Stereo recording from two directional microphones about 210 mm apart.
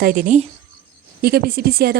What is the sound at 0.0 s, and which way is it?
Speech, 40° right (ahead or behind).